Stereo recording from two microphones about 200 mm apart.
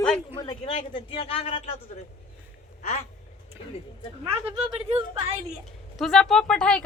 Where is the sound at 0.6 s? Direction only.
30° left (ahead or behind).